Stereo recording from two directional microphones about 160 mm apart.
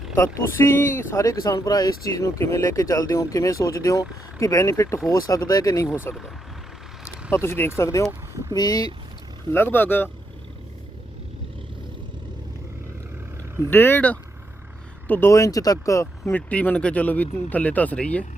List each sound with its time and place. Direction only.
0.3 s speech: 15° left (ahead or behind)
7.3 s speech: 15° left (ahead or behind)
9.7 s speech: 10° left (ahead or behind)
13.7 s speech: 15° left (ahead or behind)